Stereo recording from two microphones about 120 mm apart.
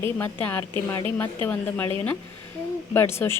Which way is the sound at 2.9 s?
20° left (ahead or behind).